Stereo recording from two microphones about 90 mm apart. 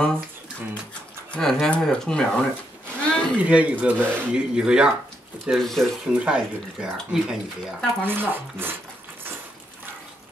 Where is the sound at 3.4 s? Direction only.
15° right (ahead or behind).